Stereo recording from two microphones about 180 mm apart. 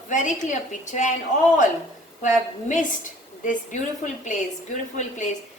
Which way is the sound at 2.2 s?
45° left (ahead or behind).